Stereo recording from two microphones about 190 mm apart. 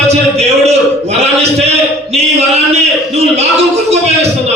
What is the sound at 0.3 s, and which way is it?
A man's voice, 35° right (ahead or behind).